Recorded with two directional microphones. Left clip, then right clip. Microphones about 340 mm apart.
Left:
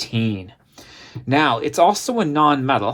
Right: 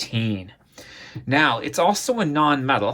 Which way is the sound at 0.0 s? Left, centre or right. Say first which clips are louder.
Left 3 dB; centre.